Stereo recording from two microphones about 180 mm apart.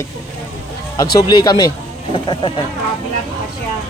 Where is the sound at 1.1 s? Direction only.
20° left (ahead or behind).